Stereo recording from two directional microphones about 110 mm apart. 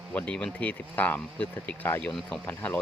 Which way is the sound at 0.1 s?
15° left (ahead or behind).